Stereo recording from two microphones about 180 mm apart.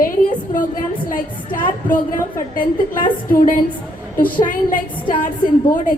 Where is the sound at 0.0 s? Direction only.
45° left (ahead or behind).